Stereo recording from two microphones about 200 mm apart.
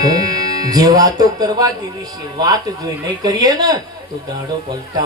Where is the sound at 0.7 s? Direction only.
20° right (ahead or behind).